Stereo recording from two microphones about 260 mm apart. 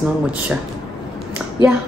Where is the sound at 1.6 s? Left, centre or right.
Centre.